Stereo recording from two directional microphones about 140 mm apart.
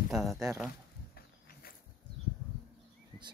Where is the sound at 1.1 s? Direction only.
90° left.